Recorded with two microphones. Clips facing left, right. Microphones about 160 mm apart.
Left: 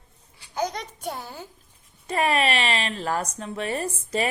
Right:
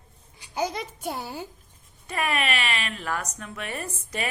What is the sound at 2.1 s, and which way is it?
Speech, 35° left (ahead or behind).